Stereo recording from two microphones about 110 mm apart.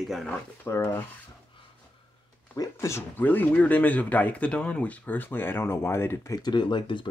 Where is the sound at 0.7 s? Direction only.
25° left (ahead or behind).